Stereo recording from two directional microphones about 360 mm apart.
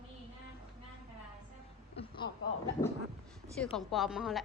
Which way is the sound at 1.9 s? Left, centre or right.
Centre.